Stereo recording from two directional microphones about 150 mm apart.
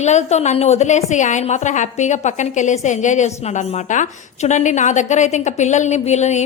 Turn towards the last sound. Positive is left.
turn(degrees=50)  # may be behind; listen again after turning